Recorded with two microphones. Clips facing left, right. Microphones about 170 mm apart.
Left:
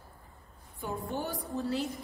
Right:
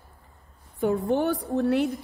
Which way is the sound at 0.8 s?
70° right (ahead or behind).